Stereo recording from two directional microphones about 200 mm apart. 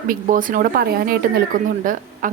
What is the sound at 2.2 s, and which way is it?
Speech, 40° right (ahead or behind).